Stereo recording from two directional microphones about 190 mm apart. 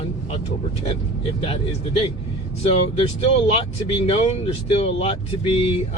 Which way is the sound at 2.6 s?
30° left (ahead or behind).